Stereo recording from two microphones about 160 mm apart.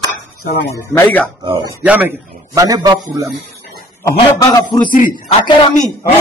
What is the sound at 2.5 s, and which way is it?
Speech, 25° right (ahead or behind).